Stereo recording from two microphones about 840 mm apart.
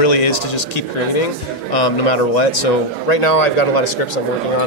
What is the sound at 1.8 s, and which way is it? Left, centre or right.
A man's voice, left.